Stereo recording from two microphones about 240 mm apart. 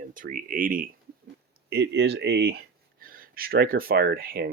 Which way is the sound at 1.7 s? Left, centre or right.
Right.